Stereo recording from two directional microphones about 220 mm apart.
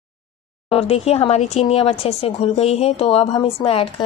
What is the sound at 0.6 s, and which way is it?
A woman's voice, 25° left (ahead or behind).